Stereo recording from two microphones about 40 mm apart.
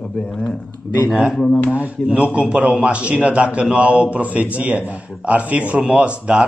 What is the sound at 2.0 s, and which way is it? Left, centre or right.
A man's voice, right.